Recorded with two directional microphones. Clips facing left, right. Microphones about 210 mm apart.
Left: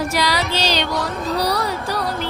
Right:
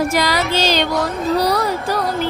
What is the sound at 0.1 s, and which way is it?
Music, 50° right (ahead or behind).